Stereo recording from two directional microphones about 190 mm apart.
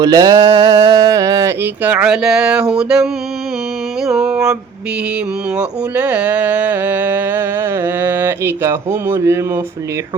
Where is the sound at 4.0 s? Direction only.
Centre (ahead or behind).